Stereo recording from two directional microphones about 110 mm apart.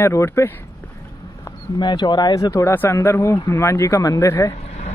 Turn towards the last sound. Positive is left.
turn(degrees=85)